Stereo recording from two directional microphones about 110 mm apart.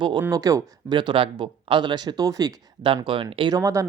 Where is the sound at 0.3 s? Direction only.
30° right (ahead or behind).